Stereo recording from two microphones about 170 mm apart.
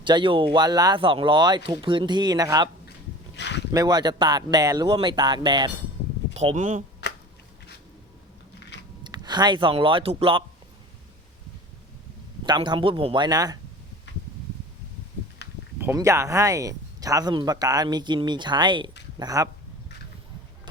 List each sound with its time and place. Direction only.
0.0 s speech: 30° right (ahead or behind)
3.3 s boat: 90° left
3.7 s speech: 25° right (ahead or behind)
6.3 s speech: 40° right (ahead or behind)
8.7 s chewing: 90° left
9.0 s speech: 25° right (ahead or behind)
12.5 s speech: 25° right (ahead or behind)
15.8 s speech: 15° right (ahead or behind)